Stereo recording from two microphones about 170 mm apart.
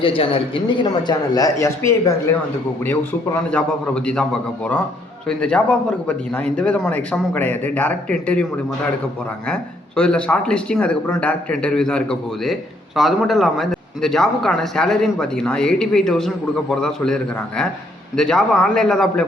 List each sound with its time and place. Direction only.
0.0 s a woman's voice: 30° left (ahead or behind); by 2.4 s 15° left (ahead or behind)
3.5 s speech: 5° left (ahead or behind)
5.4 s speech: 10° left (ahead or behind)
9.5 s speech: 5° left (ahead or behind)
18.2 s speech: centre (ahead or behind)